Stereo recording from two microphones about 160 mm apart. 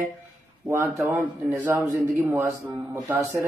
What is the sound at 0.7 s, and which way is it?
Speech, 15° right (ahead or behind).